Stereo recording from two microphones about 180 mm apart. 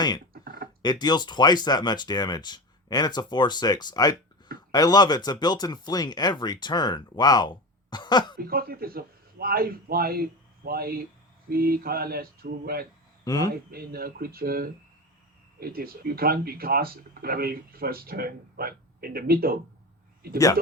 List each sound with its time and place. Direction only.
0.4 s a sound: 50° right (ahead or behind)
0.8 s speech: 25° left (ahead or behind)
8.4 s a man's voice: 55° right (ahead or behind)
13.2 s speech: 20° left (ahead or behind)
13.5 s speech: 55° right (ahead or behind)